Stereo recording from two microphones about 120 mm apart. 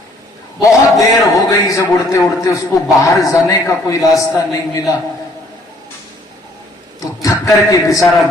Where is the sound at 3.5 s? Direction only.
30° left (ahead or behind).